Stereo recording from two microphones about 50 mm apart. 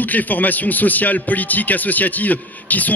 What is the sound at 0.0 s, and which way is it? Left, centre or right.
A man's voice, left.